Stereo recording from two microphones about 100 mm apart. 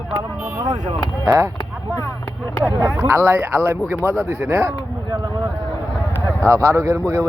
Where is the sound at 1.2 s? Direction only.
30° right (ahead or behind).